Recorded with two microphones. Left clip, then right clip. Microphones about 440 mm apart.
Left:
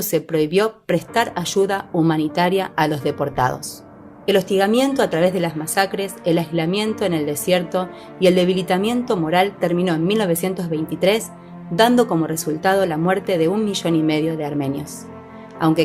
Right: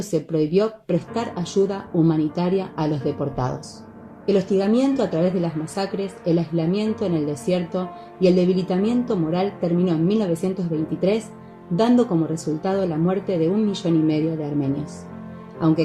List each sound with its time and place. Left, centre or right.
0.1 s speech: centre
11.8 s speech: centre